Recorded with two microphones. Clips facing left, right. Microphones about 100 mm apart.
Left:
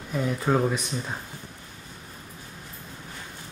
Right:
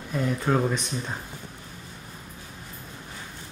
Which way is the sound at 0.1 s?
5° left (ahead or behind).